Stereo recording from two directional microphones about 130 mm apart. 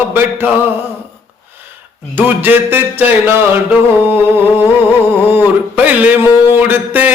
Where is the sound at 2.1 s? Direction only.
15° right (ahead or behind).